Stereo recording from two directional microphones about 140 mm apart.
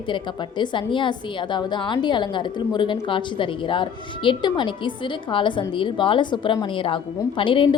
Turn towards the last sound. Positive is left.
turn(degrees=35)  # may be behind; listen again after turning